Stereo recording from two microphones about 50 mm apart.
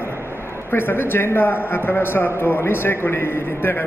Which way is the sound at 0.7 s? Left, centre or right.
Left.